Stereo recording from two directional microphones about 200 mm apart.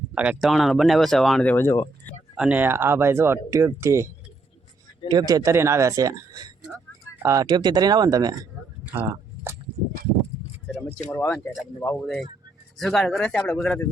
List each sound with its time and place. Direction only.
0.1 s speech: 5° right (ahead or behind); by 1.9 s 15° left (ahead or behind)
2.3 s speech: 5° right (ahead or behind)
8.8 s a sound: 10° right (ahead or behind)
10.7 s a sound: 5° left (ahead or behind)
11.1 s speech: 10° left (ahead or behind)
12.8 s speech: centre (ahead or behind)